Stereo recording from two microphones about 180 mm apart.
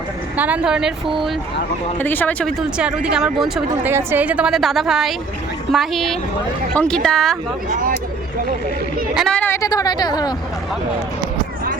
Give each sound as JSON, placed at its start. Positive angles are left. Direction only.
{"t": 0.3, "sound": "speech", "side_deg": -10}
{"t": 2.0, "sound": "speech", "side_deg": 10}
{"t": 7.7, "sound": "speech", "side_deg": -50}
{"t": 9.1, "sound": "a woman's voice", "side_deg": 5}